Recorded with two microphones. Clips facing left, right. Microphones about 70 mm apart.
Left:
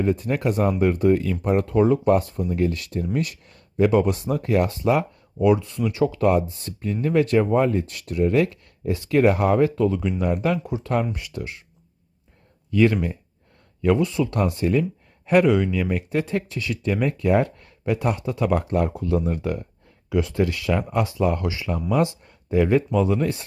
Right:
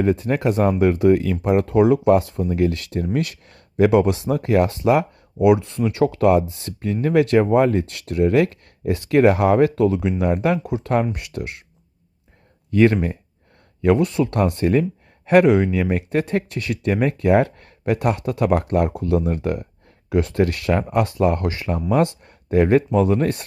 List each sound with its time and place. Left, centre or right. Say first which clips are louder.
0.0 s speech: right 3 dB; right
12.7 s speech: right 3 dB; right
15.4 s speech: right 3 dB; right
16.0 s speech: right 3 dB; right